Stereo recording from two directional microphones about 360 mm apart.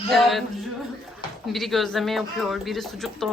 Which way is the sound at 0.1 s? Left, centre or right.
Centre.